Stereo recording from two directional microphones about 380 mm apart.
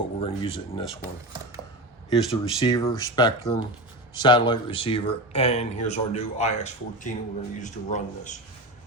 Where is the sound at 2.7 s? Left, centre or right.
Centre.